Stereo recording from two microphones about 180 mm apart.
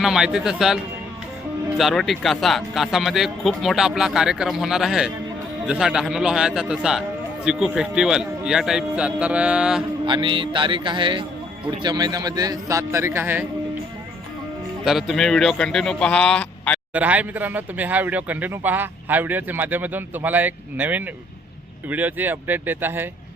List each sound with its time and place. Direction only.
0.0 s speech: centre (ahead or behind)
1.8 s speech: centre (ahead or behind)
10.1 s a man's voice: 25° right (ahead or behind)
14.8 s speech: centre (ahead or behind)
16.9 s speech: 10° right (ahead or behind)